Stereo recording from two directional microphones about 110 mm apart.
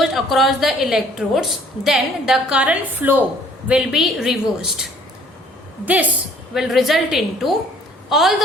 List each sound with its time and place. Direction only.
0.0 s a woman's voice: centre (ahead or behind)
5.8 s a woman's voice: 15° right (ahead or behind)
6.5 s a woman's voice: centre (ahead or behind)